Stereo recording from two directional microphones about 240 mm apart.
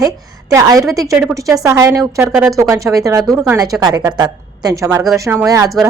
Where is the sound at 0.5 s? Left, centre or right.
Centre.